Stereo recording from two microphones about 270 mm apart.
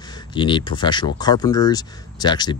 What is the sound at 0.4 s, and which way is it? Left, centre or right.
Speech, centre.